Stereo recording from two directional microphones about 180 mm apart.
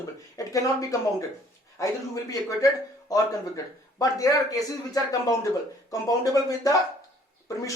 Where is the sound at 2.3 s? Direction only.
20° left (ahead or behind).